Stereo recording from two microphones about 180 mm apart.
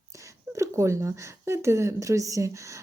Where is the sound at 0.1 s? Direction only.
15° right (ahead or behind).